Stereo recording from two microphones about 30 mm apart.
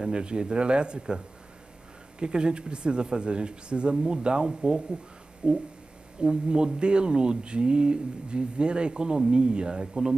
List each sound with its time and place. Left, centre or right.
0.0 s speech: right